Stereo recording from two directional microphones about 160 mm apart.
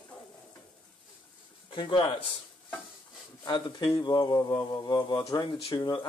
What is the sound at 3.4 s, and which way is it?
Speech, 25° left (ahead or behind).